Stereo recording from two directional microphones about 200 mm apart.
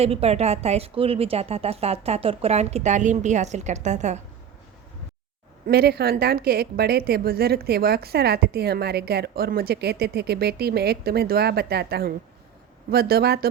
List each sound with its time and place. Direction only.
0.0 s a woman's voice: 30° right (ahead or behind)
5.6 s a woman's voice: 50° right (ahead or behind)